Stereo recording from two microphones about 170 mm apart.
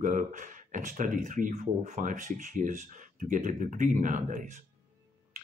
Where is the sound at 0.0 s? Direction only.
50° right (ahead or behind).